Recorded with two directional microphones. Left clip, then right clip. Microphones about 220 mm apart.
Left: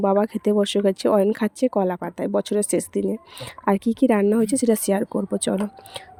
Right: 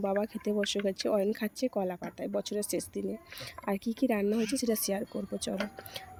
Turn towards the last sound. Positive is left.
turn(degrees=35)  # may be behind; listen again after turning